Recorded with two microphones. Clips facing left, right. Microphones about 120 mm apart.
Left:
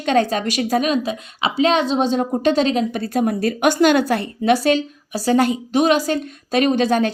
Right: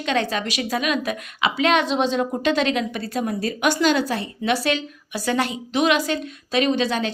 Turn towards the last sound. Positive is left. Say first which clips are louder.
# left 5 dB
turn(degrees=50)  # may be behind; listen again after turning